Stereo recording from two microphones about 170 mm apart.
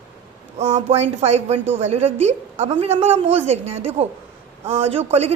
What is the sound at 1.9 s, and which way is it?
A woman's voice, 40° right (ahead or behind).